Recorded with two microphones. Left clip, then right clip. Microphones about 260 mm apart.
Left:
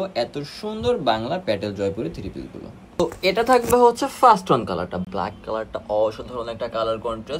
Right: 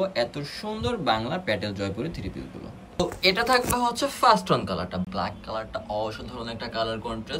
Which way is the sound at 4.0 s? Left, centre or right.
Left.